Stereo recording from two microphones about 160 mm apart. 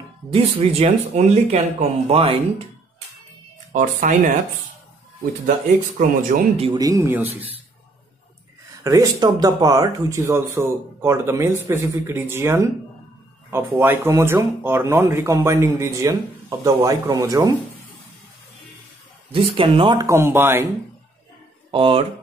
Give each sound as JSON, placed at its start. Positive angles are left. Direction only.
{"t": 0.3, "sound": "speech", "side_deg": -40}
{"t": 3.7, "sound": "speech", "side_deg": -50}
{"t": 5.9, "sound": "speech", "side_deg": -55}
{"t": 6.5, "sound": "speech", "side_deg": -35}
{"t": 6.8, "sound": "speech", "side_deg": -15}
{"t": 8.8, "sound": "speech", "side_deg": -20}
{"t": 19.3, "sound": "speech", "side_deg": -35}
{"t": 20.1, "sound": "speech", "side_deg": -15}
{"t": 21.7, "sound": "speech", "side_deg": -35}